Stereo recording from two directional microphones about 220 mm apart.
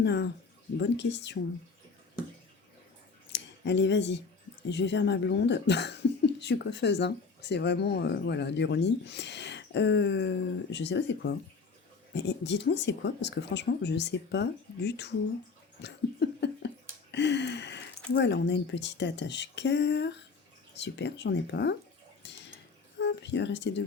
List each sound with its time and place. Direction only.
0.0 s speech: 50° left (ahead or behind)
3.3 s speech: 55° left (ahead or behind)
15.8 s a sound: 50° left (ahead or behind)
18.1 s speech: 50° left (ahead or behind)
22.2 s a sound: 55° left (ahead or behind)
23.0 s speech: 50° left (ahead or behind)